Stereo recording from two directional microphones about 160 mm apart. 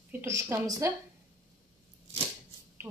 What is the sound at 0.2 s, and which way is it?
Speech, 20° right (ahead or behind).